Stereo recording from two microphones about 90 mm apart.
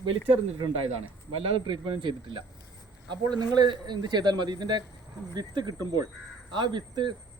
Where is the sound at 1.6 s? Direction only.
70° right (ahead or behind).